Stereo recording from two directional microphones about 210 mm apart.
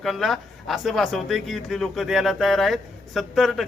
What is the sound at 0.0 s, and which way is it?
Speech, centre (ahead or behind).